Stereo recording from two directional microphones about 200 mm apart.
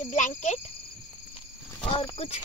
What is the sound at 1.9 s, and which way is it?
Speech, 30° left (ahead or behind).